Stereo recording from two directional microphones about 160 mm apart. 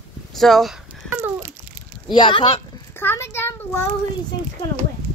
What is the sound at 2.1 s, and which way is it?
Speech, 30° left (ahead or behind).